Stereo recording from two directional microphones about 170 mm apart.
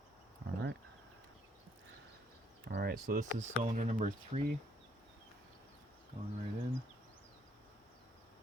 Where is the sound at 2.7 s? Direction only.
65° right (ahead or behind); by 4.4 s 45° right (ahead or behind).